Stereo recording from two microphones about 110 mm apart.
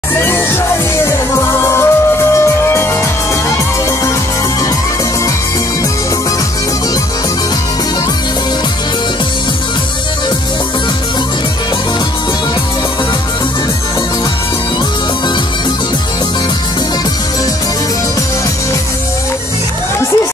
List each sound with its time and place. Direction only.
0.2 s music: 25° left (ahead or behind)